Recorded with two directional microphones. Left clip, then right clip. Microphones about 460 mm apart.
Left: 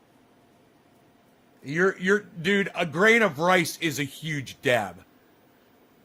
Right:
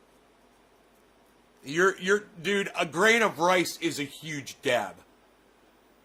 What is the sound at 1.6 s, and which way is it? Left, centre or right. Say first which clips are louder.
A man's voice: left 1 dB; centre.